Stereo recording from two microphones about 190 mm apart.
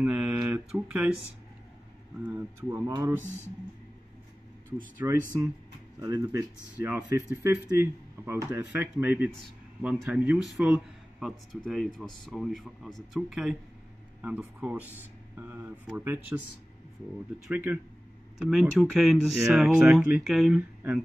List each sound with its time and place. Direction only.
0.0 s speech: 5° right (ahead or behind)
2.2 s speech: 15° right (ahead or behind)
5.0 s speech: 15° right (ahead or behind)
17.5 s speech: 10° right (ahead or behind)